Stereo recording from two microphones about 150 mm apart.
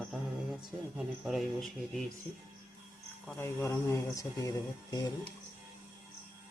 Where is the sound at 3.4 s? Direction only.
20° left (ahead or behind).